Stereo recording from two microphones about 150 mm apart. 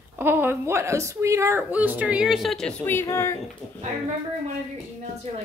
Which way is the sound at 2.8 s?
15° left (ahead or behind).